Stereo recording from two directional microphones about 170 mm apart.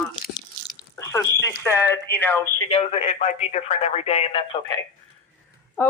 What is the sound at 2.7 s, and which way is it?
Speech, 40° left (ahead or behind).